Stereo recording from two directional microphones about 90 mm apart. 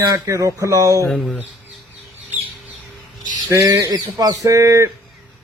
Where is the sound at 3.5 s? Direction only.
35° right (ahead or behind).